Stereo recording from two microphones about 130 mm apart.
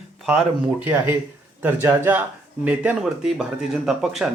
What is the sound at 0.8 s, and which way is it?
Speech, 15° right (ahead or behind).